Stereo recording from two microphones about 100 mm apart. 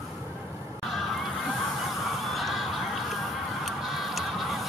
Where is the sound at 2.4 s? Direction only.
Centre (ahead or behind).